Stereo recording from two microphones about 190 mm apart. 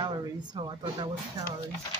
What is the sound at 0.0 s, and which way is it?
Speech, 20° right (ahead or behind).